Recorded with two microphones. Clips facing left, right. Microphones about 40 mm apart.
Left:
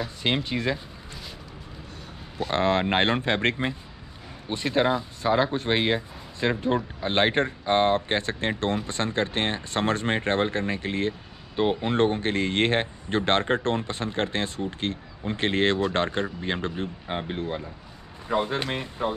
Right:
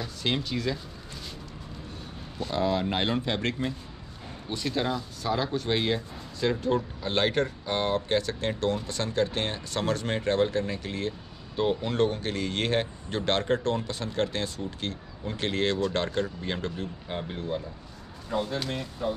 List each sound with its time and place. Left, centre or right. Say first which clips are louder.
0.2 s speech: left 2 dB; left
2.5 s speech: left 4 dB; left